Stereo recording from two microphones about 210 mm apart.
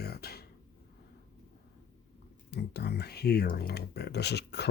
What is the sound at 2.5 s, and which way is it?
Speech, 50° left (ahead or behind).